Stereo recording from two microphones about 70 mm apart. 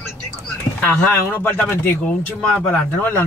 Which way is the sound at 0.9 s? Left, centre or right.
Left.